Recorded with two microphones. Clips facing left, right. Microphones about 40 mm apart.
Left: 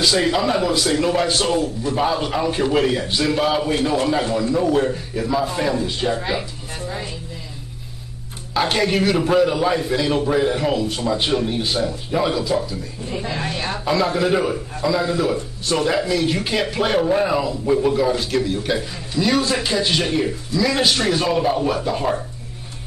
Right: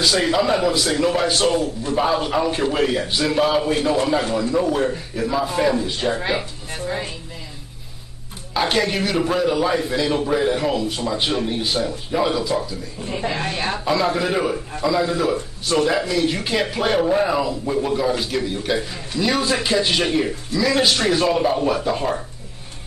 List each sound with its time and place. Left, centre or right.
0.0 s a man's voice: centre
6.1 s speech: right
8.5 s a man's voice: centre
13.1 s speech: centre
13.8 s a man's voice: centre